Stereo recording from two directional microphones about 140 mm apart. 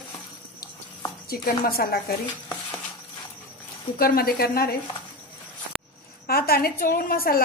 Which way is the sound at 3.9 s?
90° left.